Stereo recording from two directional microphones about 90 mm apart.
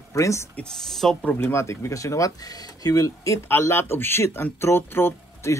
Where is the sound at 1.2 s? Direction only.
20° left (ahead or behind).